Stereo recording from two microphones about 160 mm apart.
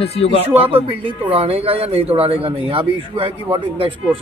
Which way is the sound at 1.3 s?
35° right (ahead or behind).